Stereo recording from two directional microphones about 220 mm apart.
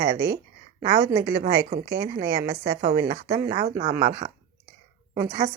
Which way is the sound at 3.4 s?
25° right (ahead or behind).